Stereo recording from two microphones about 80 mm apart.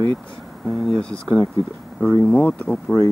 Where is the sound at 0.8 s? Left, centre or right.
Centre.